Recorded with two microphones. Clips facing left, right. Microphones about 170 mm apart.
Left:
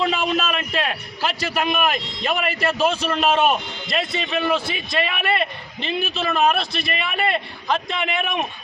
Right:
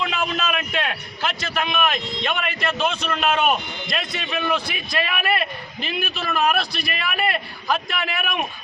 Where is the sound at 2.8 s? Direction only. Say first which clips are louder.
Left 4 dB; 30° left (ahead or behind).